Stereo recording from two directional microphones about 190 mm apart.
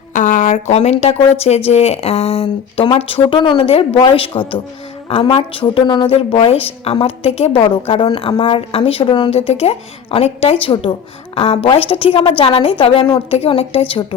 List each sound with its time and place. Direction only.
0.1 s a woman's voice: 40° left (ahead or behind)